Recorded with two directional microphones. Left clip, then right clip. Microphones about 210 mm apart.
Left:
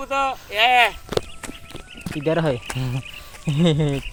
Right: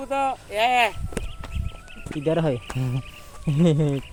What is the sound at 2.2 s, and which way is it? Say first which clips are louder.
Speech: left 2 dB; centre (ahead or behind).